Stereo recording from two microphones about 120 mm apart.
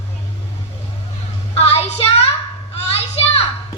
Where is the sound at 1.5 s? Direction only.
60° left (ahead or behind).